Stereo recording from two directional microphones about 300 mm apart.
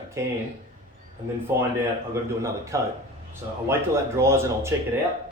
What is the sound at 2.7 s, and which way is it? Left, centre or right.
Speech, centre.